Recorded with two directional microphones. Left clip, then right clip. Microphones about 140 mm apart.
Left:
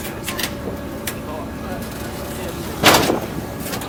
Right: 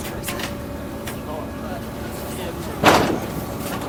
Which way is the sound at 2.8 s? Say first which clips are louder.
Left 2 dB; 15° left (ahead or behind).